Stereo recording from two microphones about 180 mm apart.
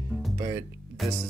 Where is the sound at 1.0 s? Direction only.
Centre (ahead or behind).